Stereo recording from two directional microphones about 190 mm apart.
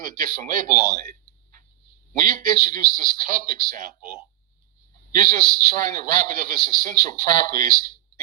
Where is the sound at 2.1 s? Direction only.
45° right (ahead or behind).